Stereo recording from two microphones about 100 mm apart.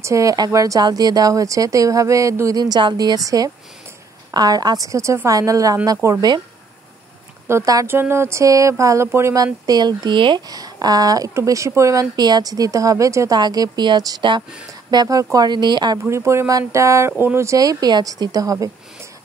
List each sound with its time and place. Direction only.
0.0 s a woman's voice: 30° right (ahead or behind)
7.4 s a woman's voice: 30° right (ahead or behind); by 10.4 s 55° right (ahead or behind)
10.5 s a woman's voice: 40° right (ahead or behind)
13.4 s speech: 45° right (ahead or behind)
16.1 s a woman's voice: 30° right (ahead or behind)